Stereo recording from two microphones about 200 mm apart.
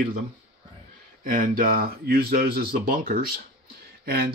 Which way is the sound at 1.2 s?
40° right (ahead or behind).